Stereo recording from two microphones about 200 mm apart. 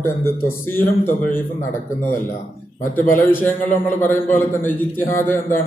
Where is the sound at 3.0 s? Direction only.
10° left (ahead or behind).